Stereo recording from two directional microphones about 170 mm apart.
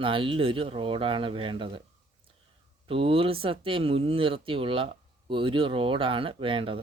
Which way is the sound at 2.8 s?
35° right (ahead or behind).